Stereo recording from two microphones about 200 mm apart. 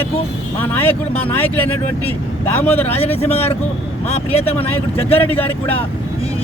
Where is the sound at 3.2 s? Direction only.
30° left (ahead or behind).